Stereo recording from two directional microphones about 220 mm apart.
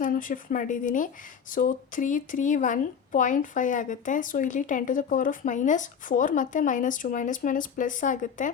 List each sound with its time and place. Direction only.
0.0 s speech: 40° left (ahead or behind)